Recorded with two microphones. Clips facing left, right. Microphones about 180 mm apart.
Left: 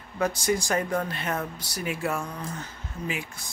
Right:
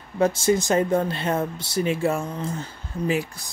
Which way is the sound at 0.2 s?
25° right (ahead or behind).